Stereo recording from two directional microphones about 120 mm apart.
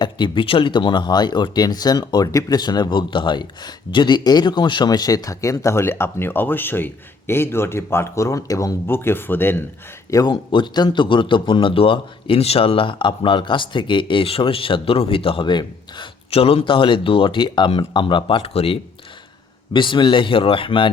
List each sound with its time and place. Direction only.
0.0 s speech: 40° left (ahead or behind); by 9.6 s 15° left (ahead or behind)
10.1 s speech: 30° left (ahead or behind)
10.5 s a man's voice: 40° left (ahead or behind)
19.7 s a man's voice: 40° left (ahead or behind)